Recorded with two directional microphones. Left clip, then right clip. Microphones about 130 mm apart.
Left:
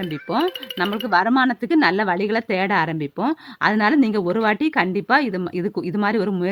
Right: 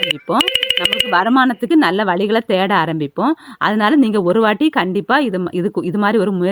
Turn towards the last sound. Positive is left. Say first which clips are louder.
# right 6 dB
turn(degrees=-25)  # may be behind; listen again after turning